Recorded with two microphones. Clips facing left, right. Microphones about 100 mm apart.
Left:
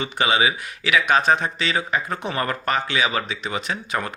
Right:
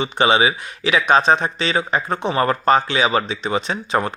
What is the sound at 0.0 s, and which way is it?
Speech, 25° right (ahead or behind).